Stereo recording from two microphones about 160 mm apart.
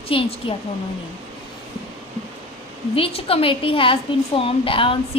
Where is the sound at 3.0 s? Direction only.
35° left (ahead or behind).